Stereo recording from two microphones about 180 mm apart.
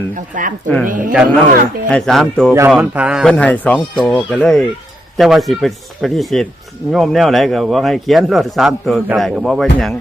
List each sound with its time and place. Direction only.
0.3 s speech: 45° right (ahead or behind)
0.9 s a man's voice: 5° right (ahead or behind)
2.5 s a man's voice: 15° right (ahead or behind)